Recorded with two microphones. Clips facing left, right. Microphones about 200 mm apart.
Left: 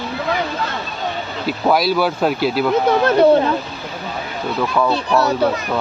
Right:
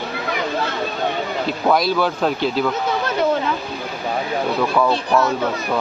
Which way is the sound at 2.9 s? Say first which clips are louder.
Left 7 dB; 55° left (ahead or behind).